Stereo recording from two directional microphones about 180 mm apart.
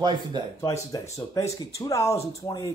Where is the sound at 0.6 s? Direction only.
15° left (ahead or behind).